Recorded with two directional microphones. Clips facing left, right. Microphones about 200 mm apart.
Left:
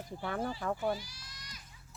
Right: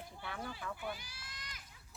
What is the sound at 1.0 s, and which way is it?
Children playing, 55° right (ahead or behind).